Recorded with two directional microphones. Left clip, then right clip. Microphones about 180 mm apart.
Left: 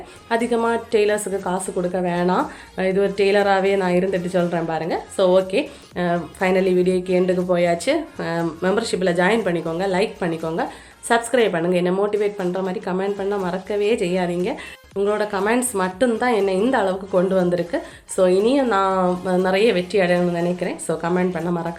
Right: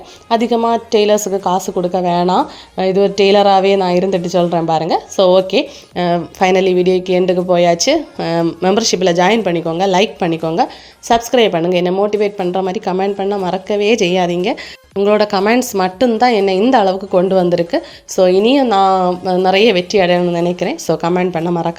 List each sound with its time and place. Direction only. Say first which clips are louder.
0.3 s a woman's voice: right 6 dB; 30° right (ahead or behind)